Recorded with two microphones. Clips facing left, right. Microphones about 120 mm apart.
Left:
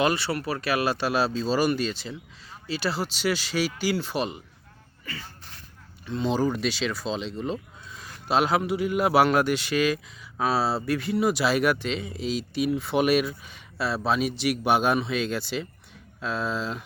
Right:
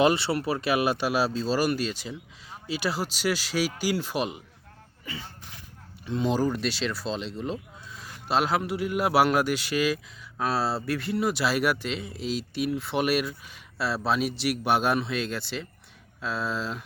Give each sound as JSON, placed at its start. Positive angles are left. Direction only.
{"t": 0.0, "sound": "speech", "side_deg": -25}
{"t": 5.0, "sound": "a sound", "side_deg": -20}
{"t": 6.1, "sound": "speech", "side_deg": -10}